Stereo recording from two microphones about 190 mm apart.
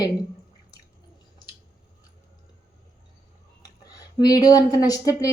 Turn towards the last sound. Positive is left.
turn(degrees=20)  # may be behind; listen again after turning